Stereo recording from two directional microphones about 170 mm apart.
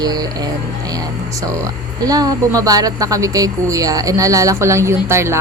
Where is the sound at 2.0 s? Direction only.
20° right (ahead or behind).